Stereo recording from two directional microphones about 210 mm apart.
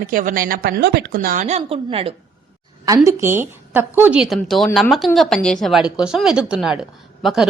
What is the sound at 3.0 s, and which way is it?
A woman's voice, 10° right (ahead or behind).